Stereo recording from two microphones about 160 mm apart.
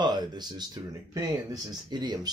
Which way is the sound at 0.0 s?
25° right (ahead or behind).